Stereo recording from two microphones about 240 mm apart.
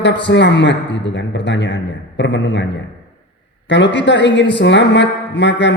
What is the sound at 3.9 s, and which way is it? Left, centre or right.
A man's voice, left.